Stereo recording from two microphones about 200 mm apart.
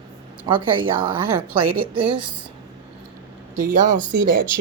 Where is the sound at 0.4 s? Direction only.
25° right (ahead or behind).